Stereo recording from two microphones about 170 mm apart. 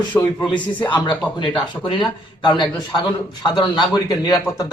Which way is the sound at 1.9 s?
30° left (ahead or behind).